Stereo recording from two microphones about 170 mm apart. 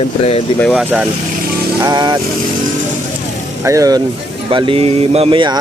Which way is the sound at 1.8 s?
25° right (ahead or behind).